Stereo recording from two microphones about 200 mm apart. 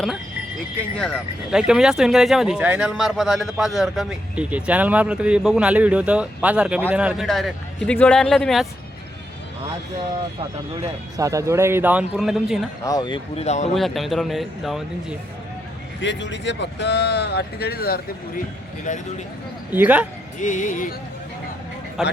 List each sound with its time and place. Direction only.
0.9 s speech: centre (ahead or behind)
11.2 s speech: 15° right (ahead or behind)
12.8 s speech: 20° left (ahead or behind)
13.7 s speech: centre (ahead or behind)
16.0 s speech: 65° left (ahead or behind)
18.9 s speech: 40° left (ahead or behind)
19.7 s speech: 10° right (ahead or behind)
20.4 s speech: 40° left (ahead or behind)
22.0 s speech: centre (ahead or behind)